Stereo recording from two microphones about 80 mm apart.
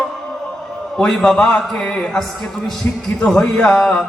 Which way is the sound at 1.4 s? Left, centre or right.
Left.